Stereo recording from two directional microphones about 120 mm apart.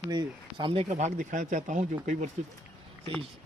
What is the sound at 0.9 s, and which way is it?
Speech, 90° right.